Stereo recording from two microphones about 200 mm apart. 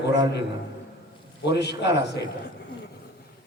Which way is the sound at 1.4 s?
60° left (ahead or behind).